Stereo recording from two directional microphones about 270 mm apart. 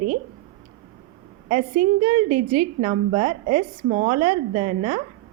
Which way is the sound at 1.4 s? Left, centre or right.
Right.